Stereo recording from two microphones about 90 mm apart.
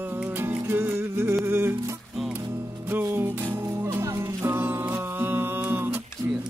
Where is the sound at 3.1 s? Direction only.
25° right (ahead or behind).